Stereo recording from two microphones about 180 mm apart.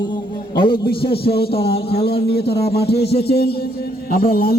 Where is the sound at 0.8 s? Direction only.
60° left (ahead or behind).